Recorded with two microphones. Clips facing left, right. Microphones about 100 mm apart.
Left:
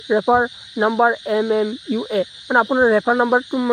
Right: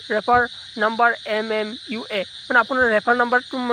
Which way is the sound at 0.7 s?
15° left (ahead or behind).